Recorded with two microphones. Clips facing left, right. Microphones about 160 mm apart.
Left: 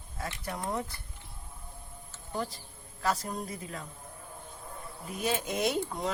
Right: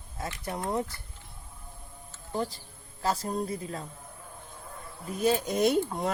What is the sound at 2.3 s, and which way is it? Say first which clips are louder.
A man's voice: right 3 dB; 30° right (ahead or behind).